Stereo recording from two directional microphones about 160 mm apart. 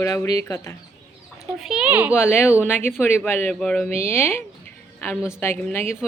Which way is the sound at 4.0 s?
15° left (ahead or behind).